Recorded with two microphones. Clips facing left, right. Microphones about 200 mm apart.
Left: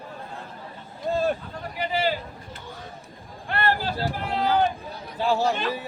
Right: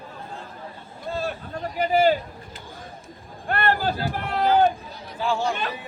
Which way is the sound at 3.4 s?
50° right (ahead or behind).